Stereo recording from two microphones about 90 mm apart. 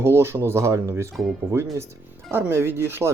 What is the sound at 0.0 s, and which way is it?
Speech, 30° right (ahead or behind).